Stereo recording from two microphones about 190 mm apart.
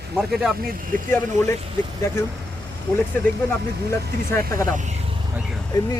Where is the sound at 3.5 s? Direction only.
15° left (ahead or behind).